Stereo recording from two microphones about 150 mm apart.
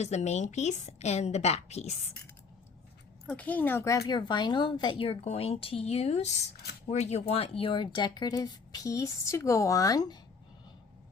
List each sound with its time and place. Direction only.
0.0 s a woman's voice: 50° left (ahead or behind)
3.2 s speech: 10° left (ahead or behind)